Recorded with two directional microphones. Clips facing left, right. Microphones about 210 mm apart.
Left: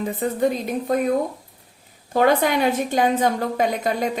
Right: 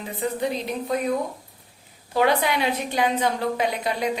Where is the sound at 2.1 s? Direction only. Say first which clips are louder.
Left 3 dB; 45° left (ahead or behind).